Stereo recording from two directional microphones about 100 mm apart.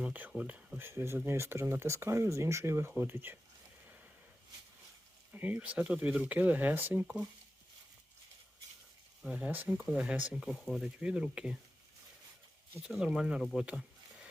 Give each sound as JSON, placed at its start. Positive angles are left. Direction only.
{"t": 0.0, "sound": "speech", "side_deg": -10}
{"t": 5.3, "sound": "speech", "side_deg": -15}
{"t": 9.2, "sound": "speech", "side_deg": -15}
{"t": 10.5, "sound": "speech", "side_deg": 0}
{"t": 12.8, "sound": "speech", "side_deg": -5}